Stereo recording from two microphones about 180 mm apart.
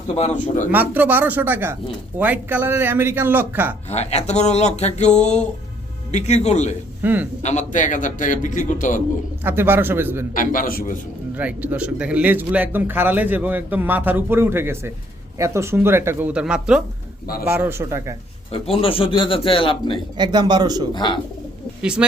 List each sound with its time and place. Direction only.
0.2 s a man's voice: 45° left (ahead or behind)
0.7 s speech: 10° right (ahead or behind)
3.8 s speech: 35° left (ahead or behind)
7.0 s a man's voice: 10° right (ahead or behind)
7.4 s a man's voice: 45° left (ahead or behind)
9.4 s speech: 10° right (ahead or behind)
10.3 s a man's voice: 50° left (ahead or behind)
11.3 s speech: 10° right (ahead or behind)
18.5 s speech: 30° left (ahead or behind)
20.1 s speech: 25° right (ahead or behind)
20.9 s speech: 25° left (ahead or behind)
21.8 s speech: 5° right (ahead or behind)